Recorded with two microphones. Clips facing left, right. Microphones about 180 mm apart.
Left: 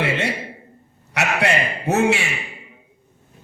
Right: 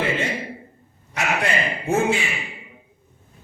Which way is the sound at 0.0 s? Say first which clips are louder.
Left 1 dB; 75° left (ahead or behind).